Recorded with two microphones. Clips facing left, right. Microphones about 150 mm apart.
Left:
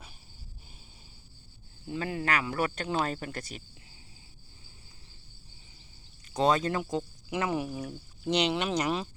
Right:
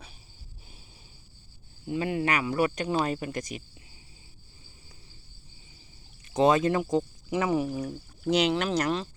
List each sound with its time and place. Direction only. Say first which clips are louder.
1.9 s speech: right 4 dB; 15° right (ahead or behind)
6.3 s speech: right 4 dB; 20° right (ahead or behind)
7.5 s speech: right 5 dB; 5° left (ahead or behind)